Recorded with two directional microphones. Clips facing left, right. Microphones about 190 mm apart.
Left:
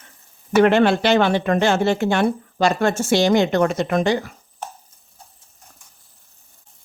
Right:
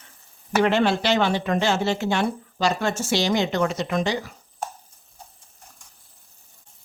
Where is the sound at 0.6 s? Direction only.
55° left (ahead or behind).